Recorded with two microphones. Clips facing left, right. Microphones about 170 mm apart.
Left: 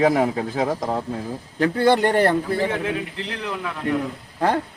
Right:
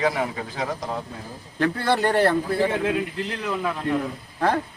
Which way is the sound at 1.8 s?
15° left (ahead or behind).